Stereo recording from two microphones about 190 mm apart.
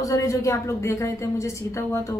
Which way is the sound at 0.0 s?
15° left (ahead or behind).